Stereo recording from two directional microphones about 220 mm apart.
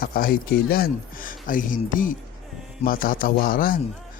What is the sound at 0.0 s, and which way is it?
Speech, 40° left (ahead or behind).